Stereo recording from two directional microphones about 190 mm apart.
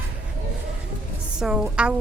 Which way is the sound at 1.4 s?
5° right (ahead or behind).